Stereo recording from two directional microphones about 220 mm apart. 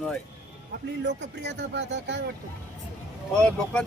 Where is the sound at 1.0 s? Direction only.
50° right (ahead or behind).